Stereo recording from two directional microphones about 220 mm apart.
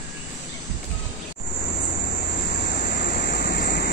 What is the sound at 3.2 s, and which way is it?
Vehicle, 45° left (ahead or behind).